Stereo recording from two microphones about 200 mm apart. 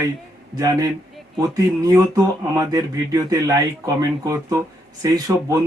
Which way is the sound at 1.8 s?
15° right (ahead or behind).